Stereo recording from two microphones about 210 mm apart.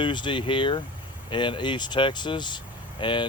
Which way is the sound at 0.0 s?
25° left (ahead or behind).